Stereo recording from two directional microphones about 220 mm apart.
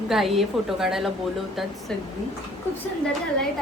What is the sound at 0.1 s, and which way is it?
A woman's voice, centre (ahead or behind).